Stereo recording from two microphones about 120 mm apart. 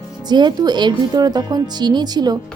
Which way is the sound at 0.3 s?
35° right (ahead or behind).